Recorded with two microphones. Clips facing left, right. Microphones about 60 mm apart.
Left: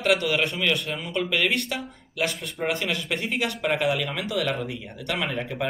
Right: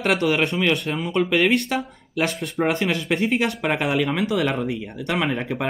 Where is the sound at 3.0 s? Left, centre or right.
Right.